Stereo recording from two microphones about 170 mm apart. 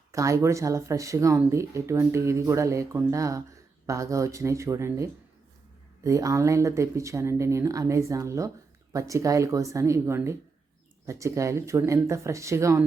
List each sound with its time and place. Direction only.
0.1 s speech: 20° right (ahead or behind)